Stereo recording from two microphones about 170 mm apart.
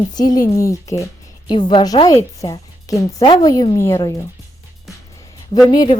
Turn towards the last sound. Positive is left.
turn(degrees=30)  # may be behind; listen again after turning